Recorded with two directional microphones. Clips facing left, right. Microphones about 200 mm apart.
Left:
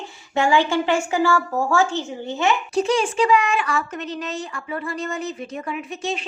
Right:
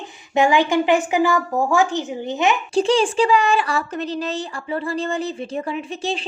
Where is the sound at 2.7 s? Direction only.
30° right (ahead or behind).